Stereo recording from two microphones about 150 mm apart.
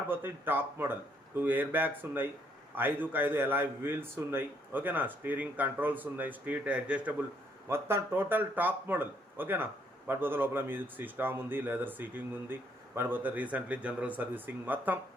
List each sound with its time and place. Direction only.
0.1 s a man's voice: 15° right (ahead or behind)